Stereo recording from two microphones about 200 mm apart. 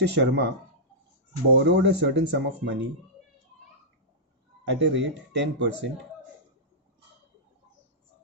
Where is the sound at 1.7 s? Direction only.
60° right (ahead or behind).